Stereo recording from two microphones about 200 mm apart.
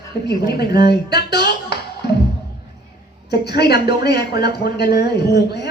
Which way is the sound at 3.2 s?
55° left (ahead or behind).